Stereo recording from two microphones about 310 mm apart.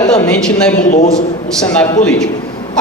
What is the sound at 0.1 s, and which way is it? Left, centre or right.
Speech, centre.